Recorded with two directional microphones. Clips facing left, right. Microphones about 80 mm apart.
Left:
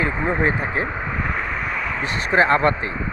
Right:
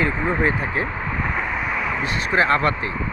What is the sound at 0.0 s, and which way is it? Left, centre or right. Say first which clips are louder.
Speech: even; centre.